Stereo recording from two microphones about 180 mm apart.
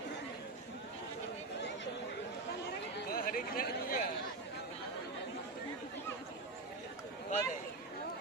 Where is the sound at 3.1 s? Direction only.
55° left (ahead or behind).